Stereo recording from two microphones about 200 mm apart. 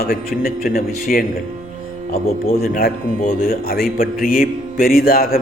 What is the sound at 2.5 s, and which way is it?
A man's voice, 45° left (ahead or behind).